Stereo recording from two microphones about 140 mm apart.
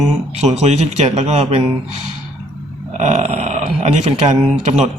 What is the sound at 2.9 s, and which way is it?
Speech, 55° right (ahead or behind).